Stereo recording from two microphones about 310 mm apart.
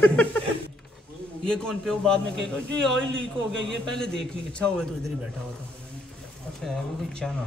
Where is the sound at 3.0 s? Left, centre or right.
Right.